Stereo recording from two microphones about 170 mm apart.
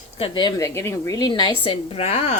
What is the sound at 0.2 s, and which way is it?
A woman's voice, 25° left (ahead or behind).